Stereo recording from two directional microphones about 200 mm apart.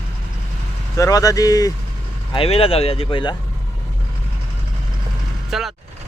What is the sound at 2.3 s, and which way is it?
Speech, 30° left (ahead or behind).